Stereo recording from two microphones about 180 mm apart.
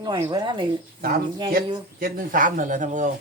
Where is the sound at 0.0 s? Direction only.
25° right (ahead or behind).